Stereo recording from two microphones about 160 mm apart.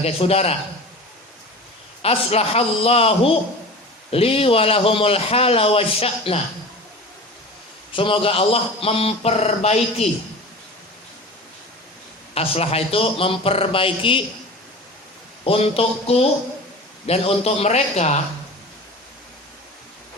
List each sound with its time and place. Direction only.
0.0 s a man's voice: 40° left (ahead or behind)
2.0 s a man's voice: 40° left (ahead or behind)
7.9 s a man's voice: 35° left (ahead or behind)
12.3 s a man's voice: 40° left (ahead or behind)
15.4 s a man's voice: 35° left (ahead or behind)